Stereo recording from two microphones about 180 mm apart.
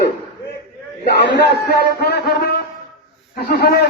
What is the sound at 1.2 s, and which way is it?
A man's voice, 70° left (ahead or behind).